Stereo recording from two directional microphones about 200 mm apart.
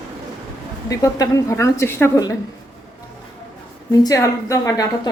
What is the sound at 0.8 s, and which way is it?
A woman's voice, 15° left (ahead or behind).